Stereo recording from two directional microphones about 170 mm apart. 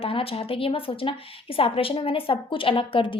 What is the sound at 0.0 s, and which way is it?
A woman's voice, 35° left (ahead or behind).